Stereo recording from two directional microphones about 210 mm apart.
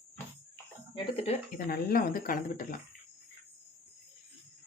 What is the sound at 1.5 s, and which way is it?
Speech, 45° left (ahead or behind).